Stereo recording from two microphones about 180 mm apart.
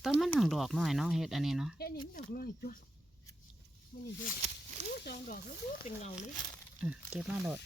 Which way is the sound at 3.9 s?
70° left (ahead or behind).